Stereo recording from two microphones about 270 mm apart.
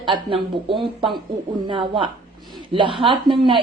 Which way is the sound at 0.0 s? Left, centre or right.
Centre.